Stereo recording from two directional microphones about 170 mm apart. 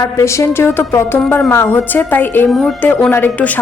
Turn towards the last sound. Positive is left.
turn(degrees=10)  # may be behind; listen again after turning